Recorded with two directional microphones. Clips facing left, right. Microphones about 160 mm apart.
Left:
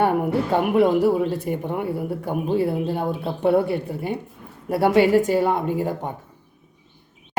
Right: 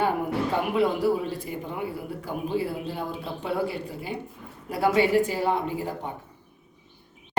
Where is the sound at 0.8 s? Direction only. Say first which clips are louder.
Left 6 dB; 60° left (ahead or behind).